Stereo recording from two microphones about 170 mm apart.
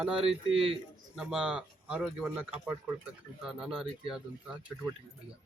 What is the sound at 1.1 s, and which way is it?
Speech, 5° right (ahead or behind).